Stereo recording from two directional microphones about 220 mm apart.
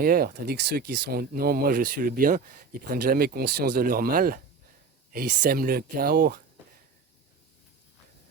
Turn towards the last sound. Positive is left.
turn(degrees=-40)  # may be behind; listen again after turning